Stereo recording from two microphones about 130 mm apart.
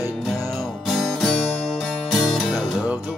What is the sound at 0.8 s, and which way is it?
Music, centre (ahead or behind).